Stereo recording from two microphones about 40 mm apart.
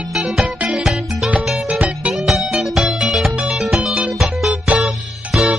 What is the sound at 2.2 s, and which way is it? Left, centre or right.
Music, centre.